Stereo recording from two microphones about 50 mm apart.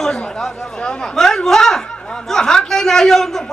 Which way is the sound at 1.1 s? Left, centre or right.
Centre.